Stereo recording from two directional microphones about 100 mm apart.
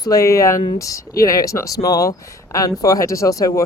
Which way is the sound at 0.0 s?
35° left (ahead or behind).